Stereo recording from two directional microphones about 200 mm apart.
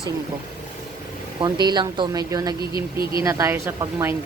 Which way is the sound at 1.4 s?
20° right (ahead or behind).